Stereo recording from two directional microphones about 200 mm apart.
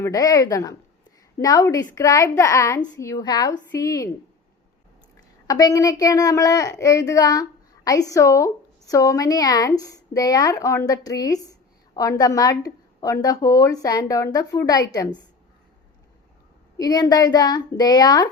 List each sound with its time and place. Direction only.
0.0 s a woman's voice: 15° left (ahead or behind)
5.5 s a woman's voice: 20° left (ahead or behind)
16.7 s a woman's voice: 20° left (ahead or behind)